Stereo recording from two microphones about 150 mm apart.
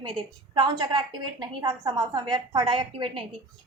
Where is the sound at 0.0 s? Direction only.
30° right (ahead or behind).